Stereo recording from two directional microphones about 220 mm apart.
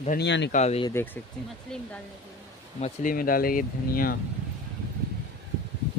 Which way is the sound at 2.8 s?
40° left (ahead or behind).